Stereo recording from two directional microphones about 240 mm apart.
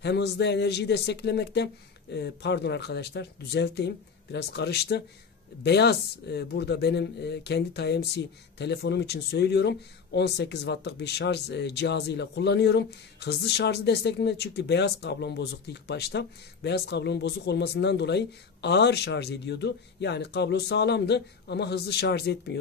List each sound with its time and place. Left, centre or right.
0.0 s speech: left